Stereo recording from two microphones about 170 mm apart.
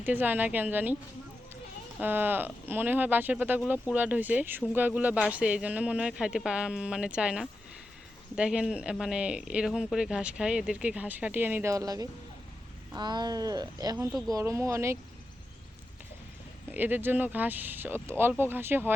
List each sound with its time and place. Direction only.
0.0 s speech: 10° right (ahead or behind)
2.0 s speech: 10° right (ahead or behind)
16.7 s speech: 10° right (ahead or behind)